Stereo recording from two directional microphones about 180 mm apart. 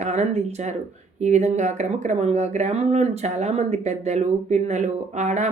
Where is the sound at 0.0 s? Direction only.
40° right (ahead or behind).